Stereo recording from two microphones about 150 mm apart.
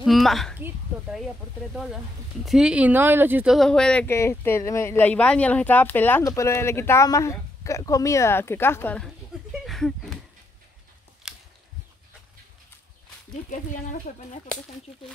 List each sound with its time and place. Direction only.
0.0 s a woman's voice: centre (ahead or behind)
0.6 s a woman's voice: 15° right (ahead or behind)
2.4 s speech: 5° right (ahead or behind)
3.5 s speech: 5° left (ahead or behind)
9.7 s a sound: centre (ahead or behind)
13.5 s speech: 55° left (ahead or behind)